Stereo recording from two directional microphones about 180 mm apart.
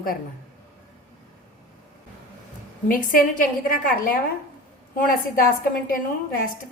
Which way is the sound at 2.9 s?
50° left (ahead or behind).